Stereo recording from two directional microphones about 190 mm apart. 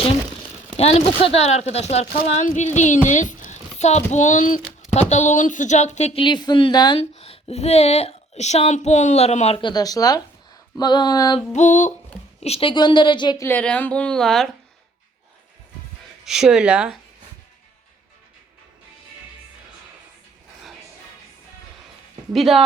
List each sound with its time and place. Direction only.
0.8 s a woman's voice: 35° left (ahead or behind)
11.5 s a woman's voice: 40° left (ahead or behind); by 13.5 s 25° left (ahead or behind)
13.5 s a woman's voice: 10° left (ahead or behind)
16.2 s speech: 5° right (ahead or behind)
22.3 s speech: centre (ahead or behind)